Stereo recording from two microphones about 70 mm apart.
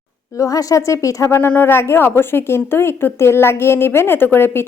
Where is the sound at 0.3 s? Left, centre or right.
Left.